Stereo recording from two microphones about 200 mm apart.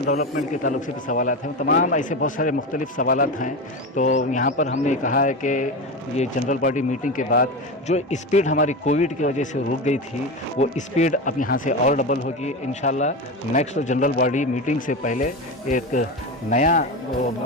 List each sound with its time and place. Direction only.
0.1 s speech: 40° left (ahead or behind)